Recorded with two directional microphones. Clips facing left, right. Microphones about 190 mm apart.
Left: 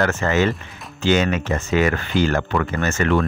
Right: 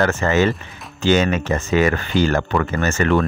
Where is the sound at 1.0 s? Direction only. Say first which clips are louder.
Right 2 dB; 40° right (ahead or behind).